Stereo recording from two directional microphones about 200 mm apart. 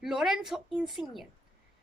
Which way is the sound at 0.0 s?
Centre (ahead or behind).